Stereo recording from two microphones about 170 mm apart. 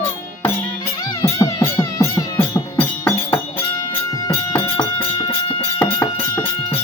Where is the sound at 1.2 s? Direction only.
15° left (ahead or behind).